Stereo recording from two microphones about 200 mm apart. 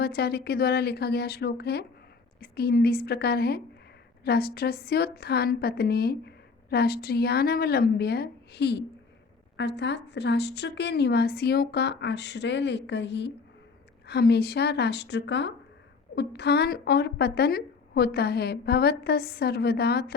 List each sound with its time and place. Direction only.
0.0 s a woman's voice: 55° left (ahead or behind)